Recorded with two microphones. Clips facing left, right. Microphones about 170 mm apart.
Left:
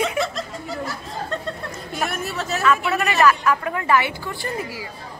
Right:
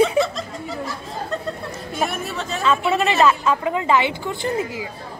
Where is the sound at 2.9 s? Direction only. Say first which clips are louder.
Right 4 dB; 25° right (ahead or behind).